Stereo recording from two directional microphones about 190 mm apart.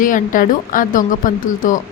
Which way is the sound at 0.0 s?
45° left (ahead or behind).